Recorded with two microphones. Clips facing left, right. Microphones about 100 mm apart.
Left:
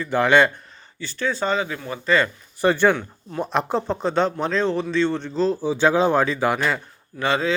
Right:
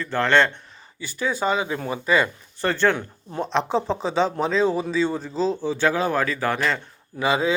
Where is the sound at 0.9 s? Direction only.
10° right (ahead or behind).